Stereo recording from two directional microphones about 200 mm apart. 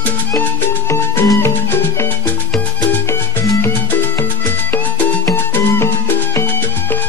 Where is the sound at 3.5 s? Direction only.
10° left (ahead or behind).